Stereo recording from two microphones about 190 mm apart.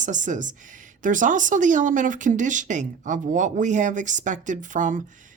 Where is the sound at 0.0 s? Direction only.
40° right (ahead or behind).